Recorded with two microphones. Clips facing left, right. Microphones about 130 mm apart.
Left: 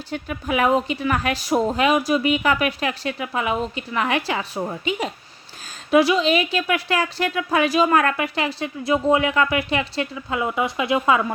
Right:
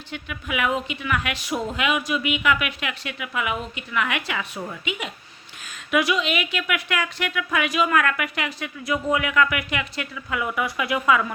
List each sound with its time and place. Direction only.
0.1 s a woman's voice: 35° left (ahead or behind)